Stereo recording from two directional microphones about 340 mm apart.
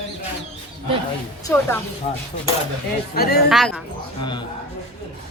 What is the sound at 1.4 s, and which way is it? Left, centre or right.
Speech, centre.